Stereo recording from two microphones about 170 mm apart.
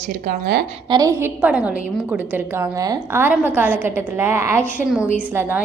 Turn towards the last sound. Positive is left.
turn(degrees=-15)  # may be behind; listen again after turning